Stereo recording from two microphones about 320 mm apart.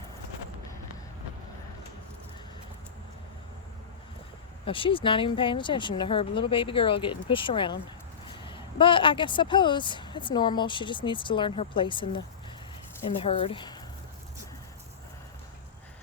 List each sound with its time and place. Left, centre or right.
4.6 s a woman's voice: centre